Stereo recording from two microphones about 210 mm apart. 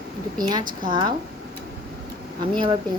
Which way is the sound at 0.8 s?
20° right (ahead or behind).